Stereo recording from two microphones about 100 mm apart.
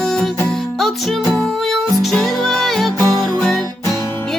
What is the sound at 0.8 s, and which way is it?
Music, centre (ahead or behind).